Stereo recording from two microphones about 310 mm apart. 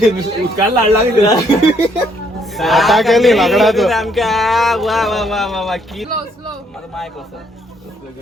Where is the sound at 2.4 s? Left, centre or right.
Centre.